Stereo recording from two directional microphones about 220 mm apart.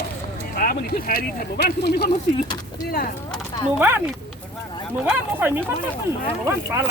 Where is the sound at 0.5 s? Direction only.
40° left (ahead or behind).